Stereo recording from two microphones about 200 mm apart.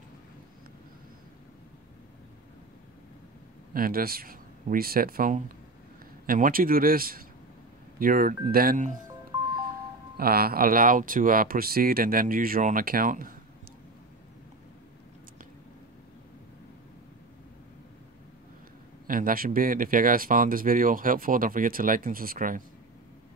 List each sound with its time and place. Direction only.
3.7 s speech: 45° right (ahead or behind)
10.1 s speech: 50° right (ahead or behind)
19.0 s speech: 45° right (ahead or behind)